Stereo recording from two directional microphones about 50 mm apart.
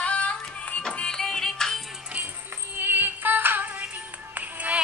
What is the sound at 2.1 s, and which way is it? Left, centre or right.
Music, right.